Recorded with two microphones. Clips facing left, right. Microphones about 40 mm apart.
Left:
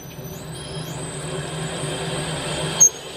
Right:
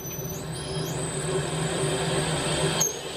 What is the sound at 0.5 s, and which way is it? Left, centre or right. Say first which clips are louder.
Vehicle: right 1 dB; left.